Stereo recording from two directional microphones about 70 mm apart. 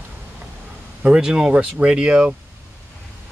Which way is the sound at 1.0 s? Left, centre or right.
Centre.